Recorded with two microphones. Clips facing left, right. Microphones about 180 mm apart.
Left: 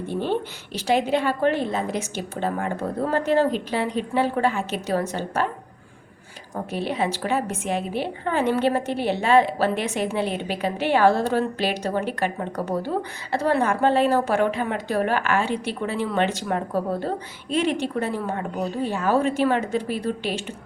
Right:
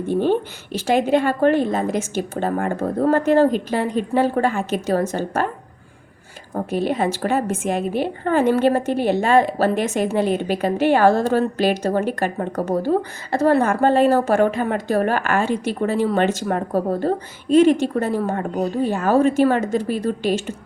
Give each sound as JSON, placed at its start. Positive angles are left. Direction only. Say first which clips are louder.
{"t": 0.1, "sound": "a woman's voice", "louder": "right 7 dB", "side_deg": -45}
{"t": 6.5, "sound": "a woman's voice", "louder": "right 6 dB", "side_deg": -45}